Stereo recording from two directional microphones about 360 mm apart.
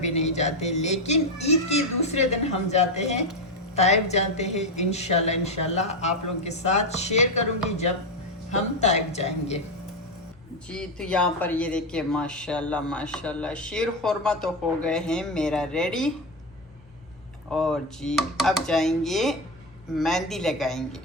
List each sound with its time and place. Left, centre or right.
0.0 s a child's voice: centre
10.7 s speech: centre
17.5 s speech: centre